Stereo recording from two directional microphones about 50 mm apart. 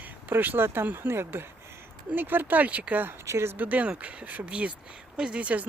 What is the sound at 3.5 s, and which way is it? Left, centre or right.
Speech, right.